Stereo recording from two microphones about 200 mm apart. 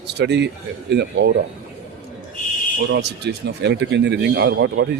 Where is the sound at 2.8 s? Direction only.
60° right (ahead or behind).